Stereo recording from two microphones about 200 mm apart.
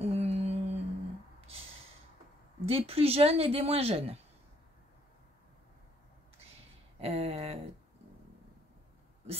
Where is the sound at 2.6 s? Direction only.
30° right (ahead or behind).